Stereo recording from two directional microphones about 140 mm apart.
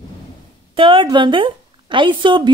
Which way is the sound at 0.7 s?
35° right (ahead or behind).